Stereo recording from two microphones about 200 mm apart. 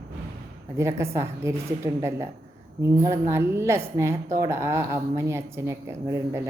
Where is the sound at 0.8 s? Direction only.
15° right (ahead or behind).